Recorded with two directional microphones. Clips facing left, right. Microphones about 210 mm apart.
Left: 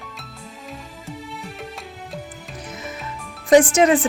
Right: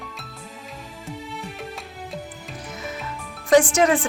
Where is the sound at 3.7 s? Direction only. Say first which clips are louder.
Left 3 dB; 20° left (ahead or behind).